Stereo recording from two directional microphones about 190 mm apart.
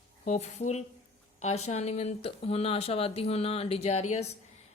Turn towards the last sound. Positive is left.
turn(degrees=35)  # may be behind; listen again after turning